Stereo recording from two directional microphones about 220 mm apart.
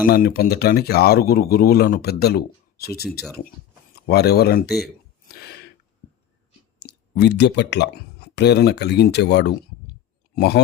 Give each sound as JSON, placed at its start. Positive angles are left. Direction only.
{"t": 0.0, "sound": "a man's voice", "side_deg": 40}
{"t": 5.3, "sound": "a sound", "side_deg": 45}
{"t": 7.2, "sound": "a man's voice", "side_deg": 50}